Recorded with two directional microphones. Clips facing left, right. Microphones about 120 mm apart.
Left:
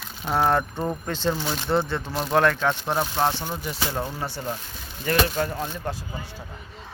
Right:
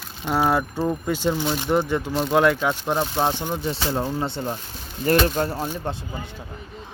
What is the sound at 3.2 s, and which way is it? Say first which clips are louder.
Speech: right 1 dB; 15° right (ahead or behind).